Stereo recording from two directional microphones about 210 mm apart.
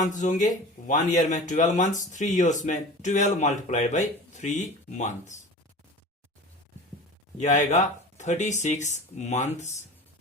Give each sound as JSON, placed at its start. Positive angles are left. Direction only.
{"t": 0.0, "sound": "speech", "side_deg": 35}
{"t": 7.3, "sound": "speech", "side_deg": 35}